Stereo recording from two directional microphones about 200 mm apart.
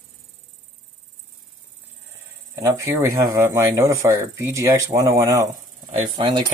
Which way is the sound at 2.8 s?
15° right (ahead or behind).